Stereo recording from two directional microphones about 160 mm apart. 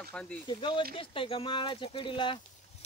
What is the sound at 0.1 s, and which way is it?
Speech, 5° left (ahead or behind).